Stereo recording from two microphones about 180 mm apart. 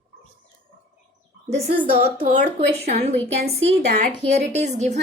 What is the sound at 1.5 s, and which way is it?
A woman's voice, 35° right (ahead or behind).